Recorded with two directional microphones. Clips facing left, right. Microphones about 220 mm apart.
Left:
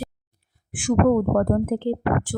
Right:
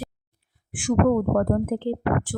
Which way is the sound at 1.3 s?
45° left (ahead or behind).